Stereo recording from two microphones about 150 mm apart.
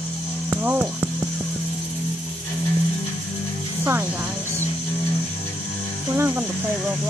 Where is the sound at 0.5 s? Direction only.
15° right (ahead or behind).